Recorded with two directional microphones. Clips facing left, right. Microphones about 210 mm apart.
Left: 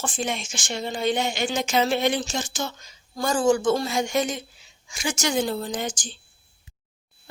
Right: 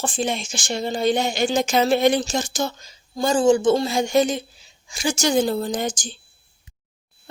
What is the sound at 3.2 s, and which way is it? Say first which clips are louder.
A woman's voice: right 4 dB; 25° right (ahead or behind).